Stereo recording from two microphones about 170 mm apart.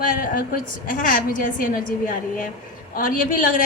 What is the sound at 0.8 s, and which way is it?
A woman's voice, 55° left (ahead or behind).